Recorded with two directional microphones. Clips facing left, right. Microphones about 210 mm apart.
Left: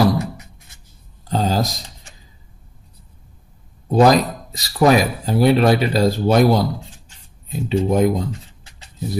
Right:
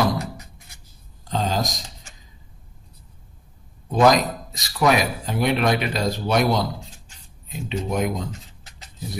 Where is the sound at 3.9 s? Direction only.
35° left (ahead or behind).